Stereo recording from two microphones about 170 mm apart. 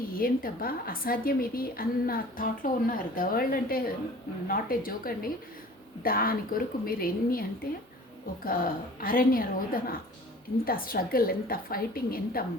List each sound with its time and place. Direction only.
0.2 s a woman's voice: 60° left (ahead or behind)